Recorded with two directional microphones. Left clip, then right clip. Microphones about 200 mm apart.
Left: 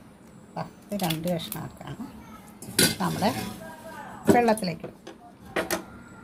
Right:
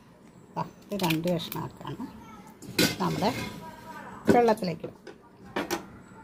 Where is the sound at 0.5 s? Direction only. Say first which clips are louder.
Right 1 dB; 20° right (ahead or behind).